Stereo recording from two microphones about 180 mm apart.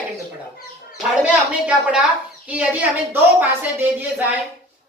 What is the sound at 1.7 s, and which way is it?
Speech, 5° right (ahead or behind).